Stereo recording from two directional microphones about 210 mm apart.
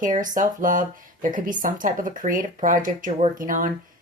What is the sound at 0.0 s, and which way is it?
Speech, 40° right (ahead or behind).